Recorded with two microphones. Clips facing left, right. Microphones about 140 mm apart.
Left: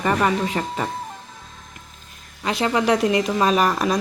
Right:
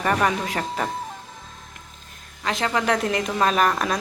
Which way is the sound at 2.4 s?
5° left (ahead or behind).